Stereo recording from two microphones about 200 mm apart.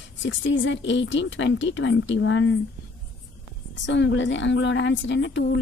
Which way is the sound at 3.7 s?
65° left (ahead or behind).